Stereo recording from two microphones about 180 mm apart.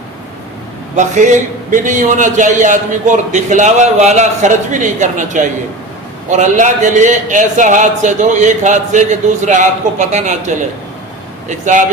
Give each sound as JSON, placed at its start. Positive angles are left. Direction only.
{"t": 0.9, "sound": "a man's voice", "side_deg": -40}